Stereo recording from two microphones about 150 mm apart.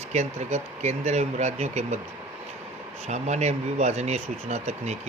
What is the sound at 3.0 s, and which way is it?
Speech, 50° right (ahead or behind).